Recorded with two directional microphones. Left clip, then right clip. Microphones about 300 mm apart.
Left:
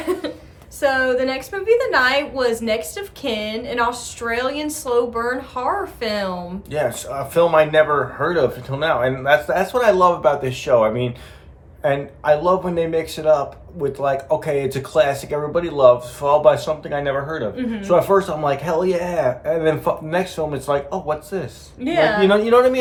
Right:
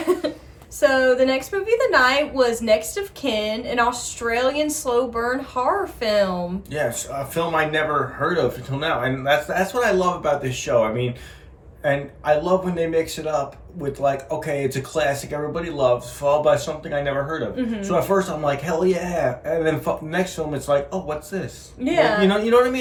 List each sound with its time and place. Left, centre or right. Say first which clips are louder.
0.8 s a woman's voice: right 1 dB; centre
7.3 s speech: left 8 dB; centre
21.8 s a woman's voice: left 1 dB; centre
22.3 s speech: left 3 dB; centre